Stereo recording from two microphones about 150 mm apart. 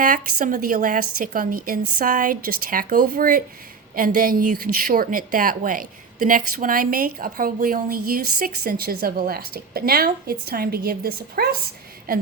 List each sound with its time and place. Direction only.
0.0 s a woman's voice: 60° right (ahead or behind); by 11.4 s 90° right